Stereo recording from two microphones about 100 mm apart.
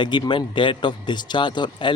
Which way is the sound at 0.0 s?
50° left (ahead or behind).